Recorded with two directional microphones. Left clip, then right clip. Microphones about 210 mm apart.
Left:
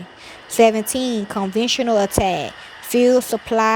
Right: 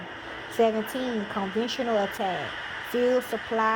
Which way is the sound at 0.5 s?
55° left (ahead or behind).